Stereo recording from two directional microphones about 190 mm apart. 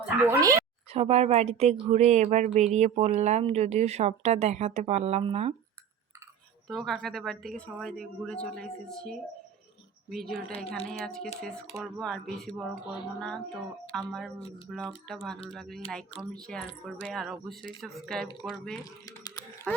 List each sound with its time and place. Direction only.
0.3 s speech: 15° right (ahead or behind)
0.9 s speech: 35° right (ahead or behind)
6.7 s speech: centre (ahead or behind)